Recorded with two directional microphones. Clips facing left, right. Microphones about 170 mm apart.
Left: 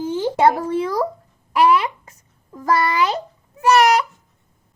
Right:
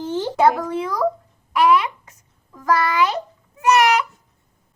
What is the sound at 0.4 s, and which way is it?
Speech, 30° left (ahead or behind).